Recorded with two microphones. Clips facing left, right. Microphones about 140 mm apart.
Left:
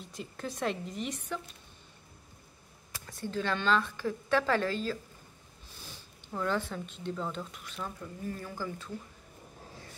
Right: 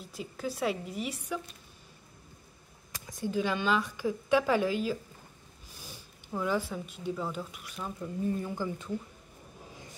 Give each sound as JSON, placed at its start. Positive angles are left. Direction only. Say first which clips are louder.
{"t": 0.0, "sound": "speech", "louder": "right 3 dB", "side_deg": -5}
{"t": 2.9, "sound": "speech", "louder": "right 4 dB", "side_deg": -15}
{"t": 6.3, "sound": "speech", "louder": "right 1 dB", "side_deg": -10}